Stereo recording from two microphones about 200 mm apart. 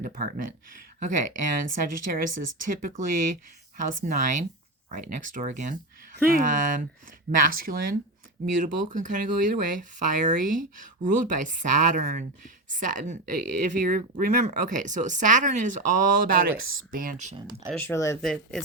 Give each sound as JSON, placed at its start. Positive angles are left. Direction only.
{"t": 0.0, "sound": "speech", "side_deg": -45}
{"t": 17.7, "sound": "speech", "side_deg": 10}
{"t": 18.2, "sound": "speech", "side_deg": 0}